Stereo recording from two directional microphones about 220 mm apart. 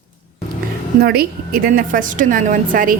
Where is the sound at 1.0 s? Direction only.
45° right (ahead or behind).